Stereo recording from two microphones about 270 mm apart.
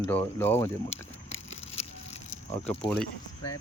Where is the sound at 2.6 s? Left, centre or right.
Centre.